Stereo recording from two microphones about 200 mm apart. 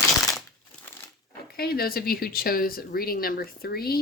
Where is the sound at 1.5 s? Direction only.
50° left (ahead or behind).